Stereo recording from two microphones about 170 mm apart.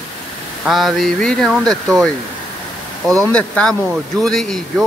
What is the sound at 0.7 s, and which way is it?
Speech, centre (ahead or behind).